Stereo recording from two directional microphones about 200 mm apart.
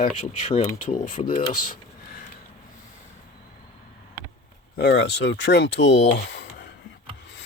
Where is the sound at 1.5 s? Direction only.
40° left (ahead or behind).